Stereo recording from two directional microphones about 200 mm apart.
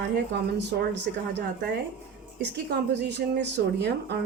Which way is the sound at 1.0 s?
60° right (ahead or behind).